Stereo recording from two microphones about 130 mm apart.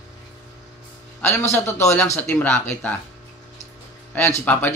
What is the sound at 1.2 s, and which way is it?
A man's voice, 20° left (ahead or behind).